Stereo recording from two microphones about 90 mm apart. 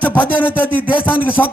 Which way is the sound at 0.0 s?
20° left (ahead or behind).